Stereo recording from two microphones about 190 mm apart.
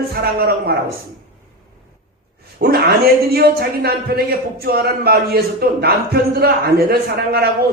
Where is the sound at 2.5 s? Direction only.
55° right (ahead or behind).